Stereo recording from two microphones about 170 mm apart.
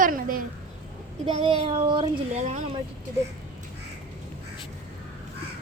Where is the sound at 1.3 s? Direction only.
35° right (ahead or behind).